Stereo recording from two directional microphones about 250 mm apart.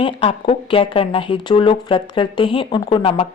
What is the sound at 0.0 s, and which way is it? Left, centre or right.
Speech, left.